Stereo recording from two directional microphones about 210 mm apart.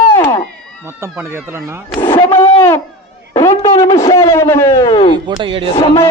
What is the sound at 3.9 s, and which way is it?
A man's voice, 20° left (ahead or behind).